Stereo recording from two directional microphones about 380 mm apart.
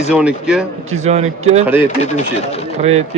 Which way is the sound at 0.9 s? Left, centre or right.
Centre.